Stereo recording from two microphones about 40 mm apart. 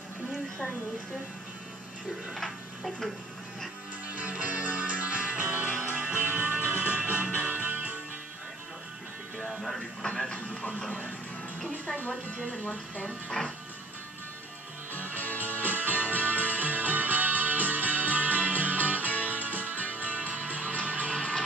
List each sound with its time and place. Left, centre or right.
4.1 s music: right
10.0 s television: centre
13.4 s music: centre
14.9 s music: right
15.6 s music: right
21.1 s music: left